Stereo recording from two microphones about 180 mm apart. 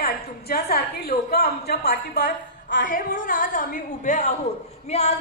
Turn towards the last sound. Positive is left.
turn(degrees=35)  # may be behind; listen again after turning